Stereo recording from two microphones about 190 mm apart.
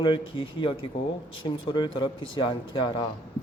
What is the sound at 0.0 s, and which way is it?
Speech, 25° left (ahead or behind).